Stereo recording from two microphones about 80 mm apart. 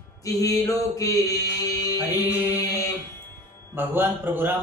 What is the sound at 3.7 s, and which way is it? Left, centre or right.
Speech, right.